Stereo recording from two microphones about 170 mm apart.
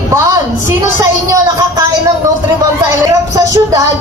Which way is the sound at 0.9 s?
20° right (ahead or behind).